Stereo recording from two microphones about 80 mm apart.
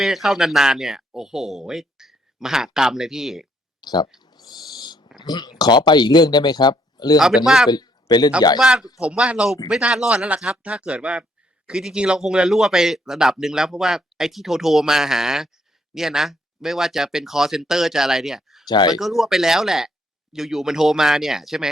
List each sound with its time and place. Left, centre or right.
0.0 s speech: centre
3.8 s speech: left
4.2 s owl: left
5.1 s speech: left
7.2 s speech: centre
7.7 s a man's voice: left
8.5 s speech: centre
18.7 s speech: left
18.9 s speech: centre